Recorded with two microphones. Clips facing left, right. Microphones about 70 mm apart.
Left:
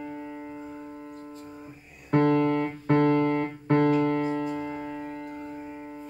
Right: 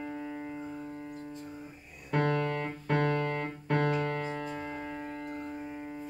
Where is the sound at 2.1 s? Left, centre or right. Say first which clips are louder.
Left 8 dB; left.